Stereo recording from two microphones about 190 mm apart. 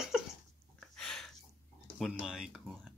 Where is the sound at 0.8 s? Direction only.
Centre (ahead or behind).